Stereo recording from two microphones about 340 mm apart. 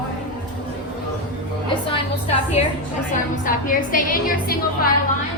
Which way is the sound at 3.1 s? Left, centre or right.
Left.